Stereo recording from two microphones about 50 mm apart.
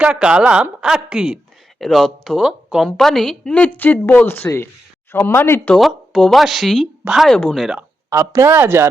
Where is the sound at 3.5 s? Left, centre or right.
Left.